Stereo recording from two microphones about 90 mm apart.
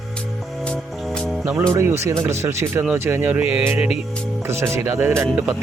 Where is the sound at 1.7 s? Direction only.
30° right (ahead or behind); by 3.6 s 15° right (ahead or behind).